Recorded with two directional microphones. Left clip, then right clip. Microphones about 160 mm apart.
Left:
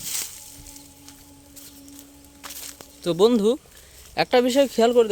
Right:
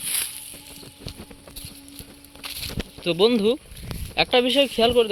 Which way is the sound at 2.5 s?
15° right (ahead or behind).